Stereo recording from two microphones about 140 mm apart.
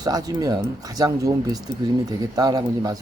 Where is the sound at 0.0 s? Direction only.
25° right (ahead or behind).